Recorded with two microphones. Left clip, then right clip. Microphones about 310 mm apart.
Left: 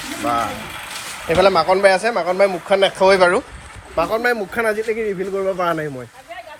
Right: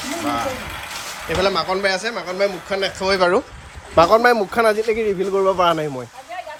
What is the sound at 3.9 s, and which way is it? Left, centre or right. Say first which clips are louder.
A man's voice: right 5 dB; right.